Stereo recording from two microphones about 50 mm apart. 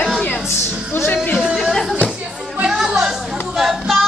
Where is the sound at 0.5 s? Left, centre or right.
Left.